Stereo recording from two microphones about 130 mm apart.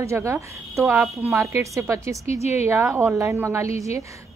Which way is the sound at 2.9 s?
20° right (ahead or behind).